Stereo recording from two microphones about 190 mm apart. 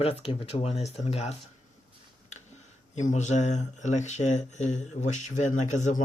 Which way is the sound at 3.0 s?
40° left (ahead or behind).